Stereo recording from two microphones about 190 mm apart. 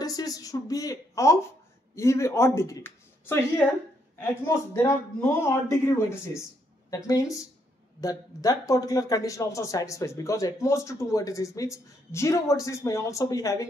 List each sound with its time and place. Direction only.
0.0 s speech: 20° left (ahead or behind)